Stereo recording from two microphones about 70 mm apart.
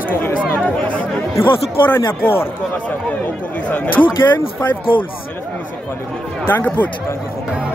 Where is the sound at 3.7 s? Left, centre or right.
Left.